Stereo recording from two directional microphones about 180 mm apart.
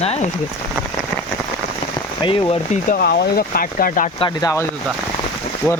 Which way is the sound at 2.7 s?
50° left (ahead or behind).